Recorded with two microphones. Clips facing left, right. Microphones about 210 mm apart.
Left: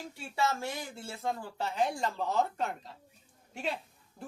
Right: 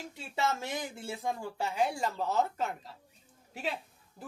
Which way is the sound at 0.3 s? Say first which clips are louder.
Even; 20° right (ahead or behind).